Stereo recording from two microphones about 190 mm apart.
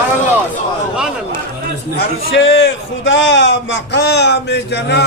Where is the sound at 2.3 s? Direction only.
70° left (ahead or behind).